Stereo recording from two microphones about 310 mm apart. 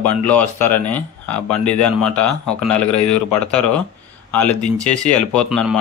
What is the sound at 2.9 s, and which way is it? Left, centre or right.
Speech, left.